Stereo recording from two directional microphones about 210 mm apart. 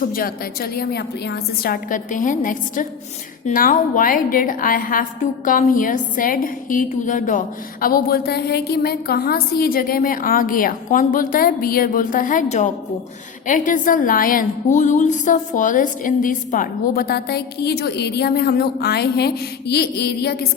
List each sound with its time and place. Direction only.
0.0 s a woman's voice: 45° left (ahead or behind)